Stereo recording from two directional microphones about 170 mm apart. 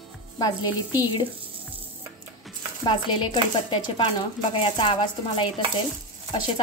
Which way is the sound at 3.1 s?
25° left (ahead or behind).